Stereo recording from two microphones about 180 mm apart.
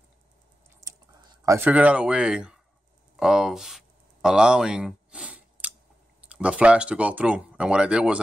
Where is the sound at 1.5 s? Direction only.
10° right (ahead or behind).